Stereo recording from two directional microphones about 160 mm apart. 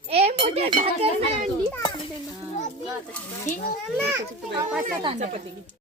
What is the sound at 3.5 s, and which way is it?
Speech, 55° left (ahead or behind).